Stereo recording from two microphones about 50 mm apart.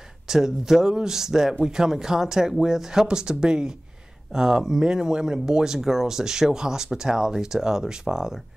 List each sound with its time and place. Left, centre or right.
0.3 s speech: centre